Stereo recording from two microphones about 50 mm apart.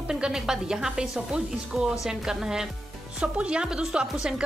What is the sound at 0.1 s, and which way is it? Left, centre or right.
A woman's voice, centre.